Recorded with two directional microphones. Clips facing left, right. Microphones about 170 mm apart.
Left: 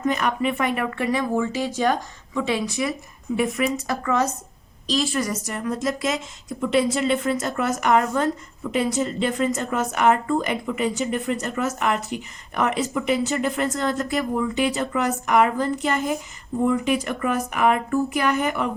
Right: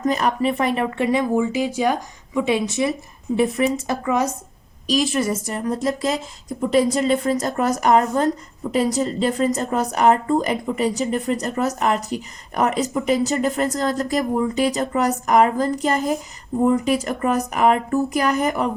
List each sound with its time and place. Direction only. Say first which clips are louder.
0.0 s speech: right 3 dB; 35° right (ahead or behind)